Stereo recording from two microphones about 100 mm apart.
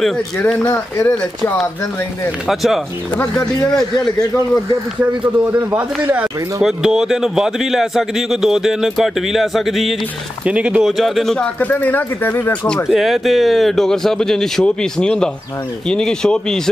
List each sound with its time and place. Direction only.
0.7 s speech: 25° left (ahead or behind)
2.4 s a man's voice: centre (ahead or behind)
5.7 s a man's voice: 15° right (ahead or behind)
10.4 s a man's voice: 10° right (ahead or behind)
11.6 s speech: 15° left (ahead or behind)
12.9 s a man's voice: centre (ahead or behind)